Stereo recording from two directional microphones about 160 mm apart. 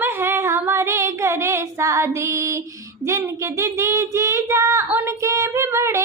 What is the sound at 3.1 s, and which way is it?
Child singing, 20° right (ahead or behind).